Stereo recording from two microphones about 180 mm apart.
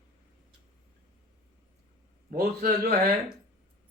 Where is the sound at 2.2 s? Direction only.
45° right (ahead or behind).